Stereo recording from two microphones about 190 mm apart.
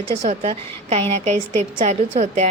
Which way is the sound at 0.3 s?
35° right (ahead or behind).